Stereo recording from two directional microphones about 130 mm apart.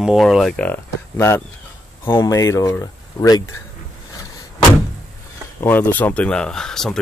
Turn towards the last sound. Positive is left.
turn(degrees=5)  # may be behind; listen again after turning